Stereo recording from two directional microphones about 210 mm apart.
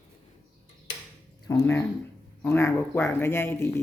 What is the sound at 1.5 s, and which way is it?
Speech, 10° left (ahead or behind).